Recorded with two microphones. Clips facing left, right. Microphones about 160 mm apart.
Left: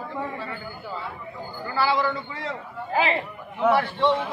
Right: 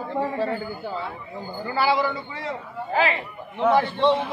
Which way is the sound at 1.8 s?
15° right (ahead or behind).